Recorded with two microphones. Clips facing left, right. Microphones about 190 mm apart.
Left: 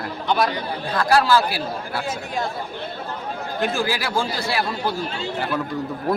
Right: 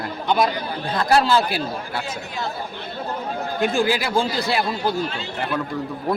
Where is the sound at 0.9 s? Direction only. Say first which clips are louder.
Even; 25° right (ahead or behind).